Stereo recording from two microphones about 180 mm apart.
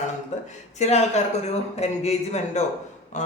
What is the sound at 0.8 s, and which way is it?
Speech, 40° left (ahead or behind).